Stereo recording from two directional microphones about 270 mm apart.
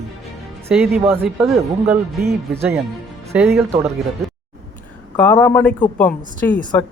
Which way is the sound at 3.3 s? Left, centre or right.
Centre.